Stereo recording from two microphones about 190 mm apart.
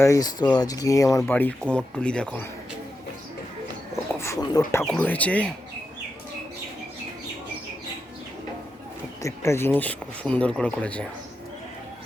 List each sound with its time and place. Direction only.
0.0 s speech: 20° left (ahead or behind)
4.2 s speech: 15° left (ahead or behind)
9.2 s speech: 15° left (ahead or behind)